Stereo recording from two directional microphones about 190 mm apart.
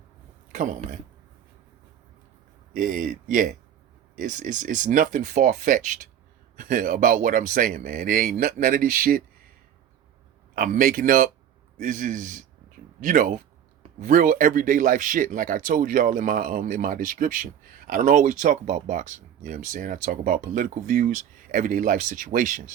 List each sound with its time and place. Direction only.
0.5 s speech: 40° right (ahead or behind)
2.7 s speech: 45° right (ahead or behind)
10.5 s speech: 45° right (ahead or behind)